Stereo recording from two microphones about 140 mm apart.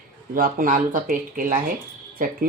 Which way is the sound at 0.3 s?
85° right.